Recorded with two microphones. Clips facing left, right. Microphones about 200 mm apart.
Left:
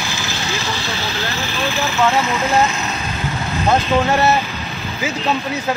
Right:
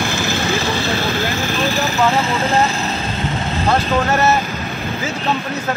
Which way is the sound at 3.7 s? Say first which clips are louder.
Left 1 dB; 15° left (ahead or behind).